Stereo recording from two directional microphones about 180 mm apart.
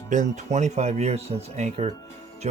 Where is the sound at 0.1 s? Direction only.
45° right (ahead or behind).